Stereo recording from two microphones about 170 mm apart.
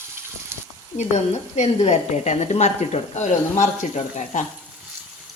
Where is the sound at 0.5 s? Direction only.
15° right (ahead or behind).